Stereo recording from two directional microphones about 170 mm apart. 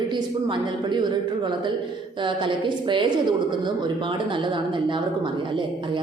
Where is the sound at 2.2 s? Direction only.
30° right (ahead or behind).